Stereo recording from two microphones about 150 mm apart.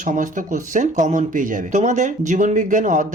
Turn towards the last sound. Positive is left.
turn(degrees=-60)  # may be behind; listen again after turning